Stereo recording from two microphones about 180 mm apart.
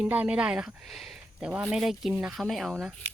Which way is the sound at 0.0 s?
5° right (ahead or behind).